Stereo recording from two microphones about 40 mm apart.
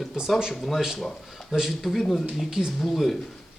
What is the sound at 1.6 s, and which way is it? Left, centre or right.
Speech, centre.